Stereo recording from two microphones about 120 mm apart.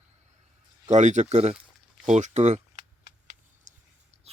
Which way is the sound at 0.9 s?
90° right.